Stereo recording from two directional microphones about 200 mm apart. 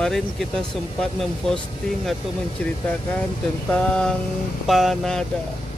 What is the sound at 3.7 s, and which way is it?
Vehicle, 5° left (ahead or behind).